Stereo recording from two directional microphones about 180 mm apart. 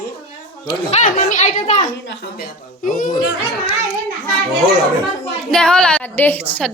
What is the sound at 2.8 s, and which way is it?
Speech, 45° left (ahead or behind).